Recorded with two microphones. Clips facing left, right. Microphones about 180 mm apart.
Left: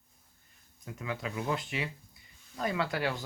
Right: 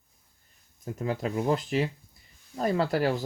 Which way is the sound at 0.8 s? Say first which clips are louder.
Right 7 dB; 45° right (ahead or behind).